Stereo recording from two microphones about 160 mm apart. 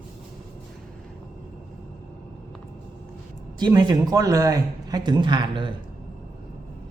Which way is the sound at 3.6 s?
25° right (ahead or behind).